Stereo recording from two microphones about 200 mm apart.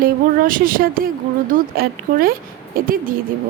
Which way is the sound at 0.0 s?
45° right (ahead or behind).